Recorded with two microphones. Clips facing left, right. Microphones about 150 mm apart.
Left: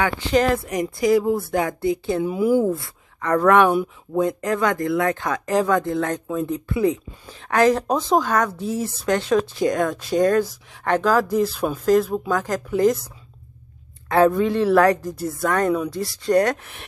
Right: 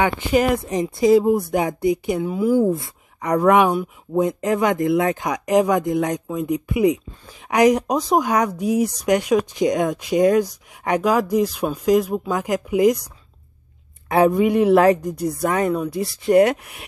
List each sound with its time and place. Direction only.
0.0 s speech: 15° right (ahead or behind)
0.7 s speech: 25° right (ahead or behind)
2.2 s speech: 5° left (ahead or behind)
2.7 s speech: 20° right (ahead or behind)
15.6 s speech: centre (ahead or behind)
16.0 s speech: 20° right (ahead or behind)